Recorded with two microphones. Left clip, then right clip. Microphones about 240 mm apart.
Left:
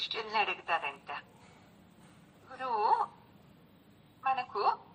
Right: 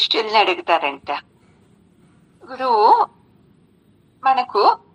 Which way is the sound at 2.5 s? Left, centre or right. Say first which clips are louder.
Right 16 dB; right.